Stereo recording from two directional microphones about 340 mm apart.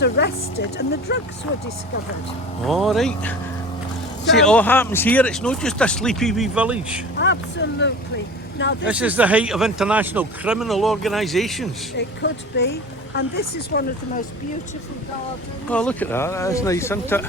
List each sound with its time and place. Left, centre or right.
0.2 s speech: left
2.6 s speech: centre
7.2 s speech: left
8.9 s speech: centre
11.9 s speech: left
15.7 s speech: centre